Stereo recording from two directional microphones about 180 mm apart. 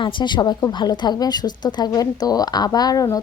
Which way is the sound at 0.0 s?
25° left (ahead or behind).